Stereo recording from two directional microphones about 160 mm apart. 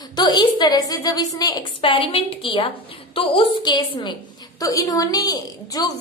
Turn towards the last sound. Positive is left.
turn(degrees=25)  # may be behind; listen again after turning